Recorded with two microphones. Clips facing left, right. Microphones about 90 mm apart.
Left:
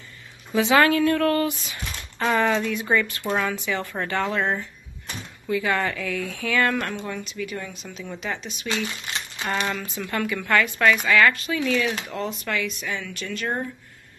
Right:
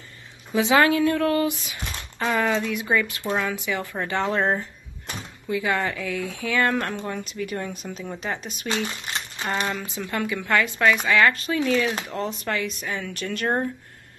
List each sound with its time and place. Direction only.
0.5 s speech: 20° right (ahead or behind)
2.3 s speech: 5° right (ahead or behind)
3.5 s a woman's voice: 15° right (ahead or behind)
4.3 s a woman's voice: 35° right (ahead or behind)
5.5 s speech: 15° right (ahead or behind)
7.2 s a woman's voice: 40° right (ahead or behind)
8.6 s a woman's voice: 30° right (ahead or behind)
9.7 s a woman's voice: 15° right (ahead or behind)
11.3 s a woman's voice: 35° right (ahead or behind)